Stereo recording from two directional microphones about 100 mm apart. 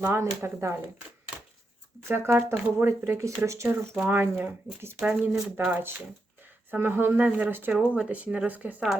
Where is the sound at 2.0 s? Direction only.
25° right (ahead or behind).